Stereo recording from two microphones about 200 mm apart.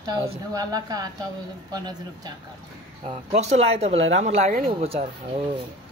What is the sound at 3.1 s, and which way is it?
Speech, 35° right (ahead or behind).